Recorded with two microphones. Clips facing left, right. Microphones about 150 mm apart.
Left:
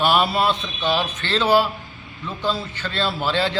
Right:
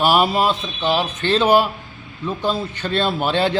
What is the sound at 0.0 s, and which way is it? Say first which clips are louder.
A man's voice: right 2 dB; 5° right (ahead or behind).